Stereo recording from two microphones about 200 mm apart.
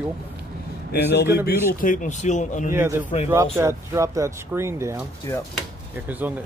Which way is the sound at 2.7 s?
10° right (ahead or behind).